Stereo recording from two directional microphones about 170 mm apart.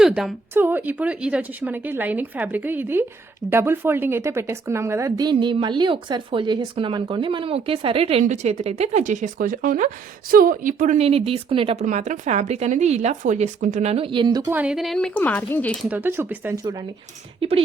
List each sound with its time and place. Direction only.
0.0 s a woman's voice: centre (ahead or behind); by 14.5 s 25° right (ahead or behind)
14.5 s speech: 5° right (ahead or behind)
15.9 s a woman's voice: 10° right (ahead or behind)